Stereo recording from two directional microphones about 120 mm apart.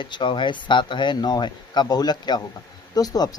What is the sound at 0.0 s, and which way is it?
Speech, 40° left (ahead or behind).